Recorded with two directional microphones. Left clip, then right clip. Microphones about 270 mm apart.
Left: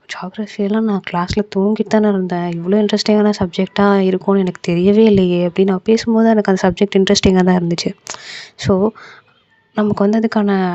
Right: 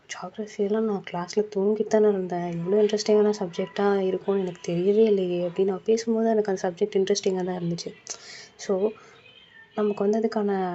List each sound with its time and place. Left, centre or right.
0.1 s speech: left